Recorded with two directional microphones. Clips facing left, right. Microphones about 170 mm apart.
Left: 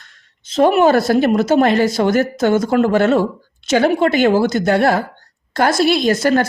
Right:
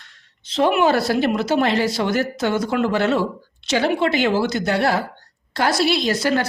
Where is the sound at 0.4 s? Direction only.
45° left (ahead or behind).